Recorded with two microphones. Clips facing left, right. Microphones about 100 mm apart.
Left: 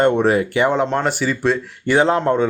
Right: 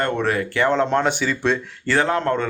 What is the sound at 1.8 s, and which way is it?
Speech, 20° left (ahead or behind).